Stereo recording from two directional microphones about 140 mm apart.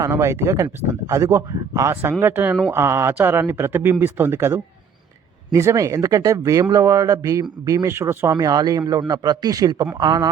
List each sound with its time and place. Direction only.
0.0 s speech: 20° right (ahead or behind)